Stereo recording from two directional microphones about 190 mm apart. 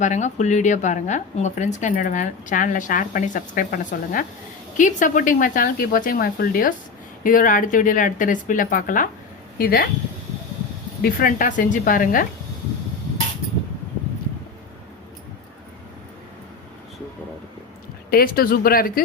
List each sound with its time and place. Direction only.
0.0 s a woman's voice: 40° left (ahead or behind)
11.0 s speech: 45° left (ahead or behind)
18.1 s speech: 50° left (ahead or behind)